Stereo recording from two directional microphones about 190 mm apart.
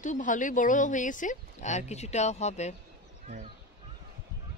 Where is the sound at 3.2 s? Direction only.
40° right (ahead or behind).